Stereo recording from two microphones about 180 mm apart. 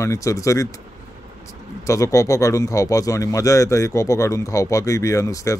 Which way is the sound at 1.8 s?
15° left (ahead or behind).